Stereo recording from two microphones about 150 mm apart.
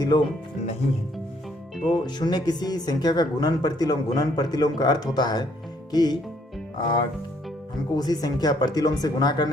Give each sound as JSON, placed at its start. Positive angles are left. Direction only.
{"t": 0.0, "sound": "speech", "side_deg": 30}
{"t": 1.9, "sound": "speech", "side_deg": 25}